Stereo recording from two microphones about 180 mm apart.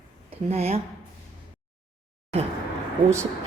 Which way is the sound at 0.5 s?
35° right (ahead or behind).